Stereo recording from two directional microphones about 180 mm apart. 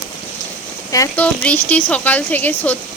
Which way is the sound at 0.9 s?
15° left (ahead or behind).